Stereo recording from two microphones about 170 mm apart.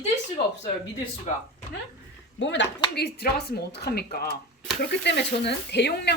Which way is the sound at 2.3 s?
90° left.